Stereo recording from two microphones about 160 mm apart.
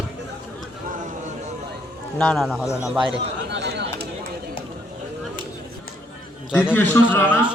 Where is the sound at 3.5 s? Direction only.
90° right.